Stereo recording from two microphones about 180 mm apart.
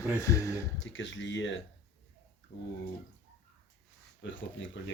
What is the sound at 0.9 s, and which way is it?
Speech, 90° left.